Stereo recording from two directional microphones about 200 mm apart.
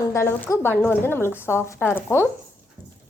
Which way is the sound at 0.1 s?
10° left (ahead or behind).